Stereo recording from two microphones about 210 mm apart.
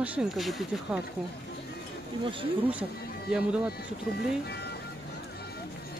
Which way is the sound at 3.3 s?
5° right (ahead or behind).